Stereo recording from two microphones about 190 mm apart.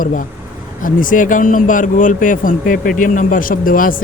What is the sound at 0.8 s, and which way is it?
A man's voice, 45° left (ahead or behind).